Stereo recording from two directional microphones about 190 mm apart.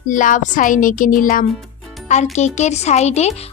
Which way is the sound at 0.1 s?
45° left (ahead or behind).